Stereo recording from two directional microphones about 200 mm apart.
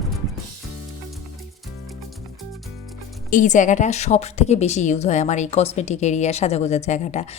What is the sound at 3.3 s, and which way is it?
A woman's voice, 40° left (ahead or behind).